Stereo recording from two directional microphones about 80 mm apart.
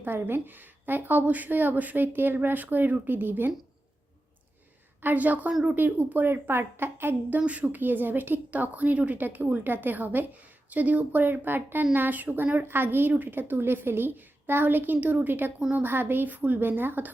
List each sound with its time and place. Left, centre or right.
0.0 s a woman's voice: right
5.0 s a woman's voice: right